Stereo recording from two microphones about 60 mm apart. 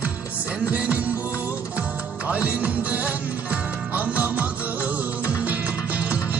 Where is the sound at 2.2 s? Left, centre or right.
Right.